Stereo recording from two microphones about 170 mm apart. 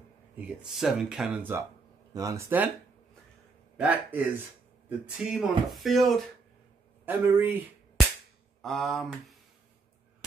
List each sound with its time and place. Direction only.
0.6 s speech: 5° right (ahead or behind)
3.7 s a man's voice: 10° right (ahead or behind)
7.1 s speech: 10° right (ahead or behind)
8.6 s speech: centre (ahead or behind)